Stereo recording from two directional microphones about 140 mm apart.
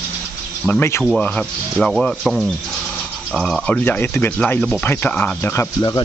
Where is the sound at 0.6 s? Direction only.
15° left (ahead or behind).